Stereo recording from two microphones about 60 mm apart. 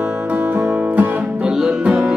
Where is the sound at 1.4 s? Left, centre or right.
Centre.